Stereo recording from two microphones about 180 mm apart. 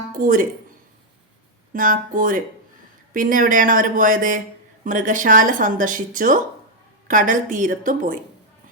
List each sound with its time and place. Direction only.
0.1 s speech: 50° right (ahead or behind)
1.7 s speech: 50° right (ahead or behind)